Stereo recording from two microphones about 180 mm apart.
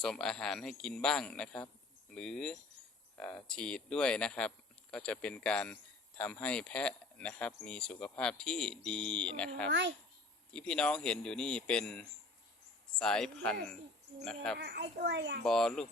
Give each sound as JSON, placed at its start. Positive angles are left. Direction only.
{"t": 0.0, "sound": "speech", "side_deg": 5}
{"t": 14.6, "sound": "a child's voice", "side_deg": -65}
{"t": 15.4, "sound": "speech", "side_deg": 5}